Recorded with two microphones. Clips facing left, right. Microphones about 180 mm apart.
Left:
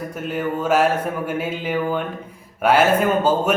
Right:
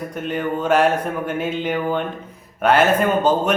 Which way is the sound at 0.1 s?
5° left (ahead or behind).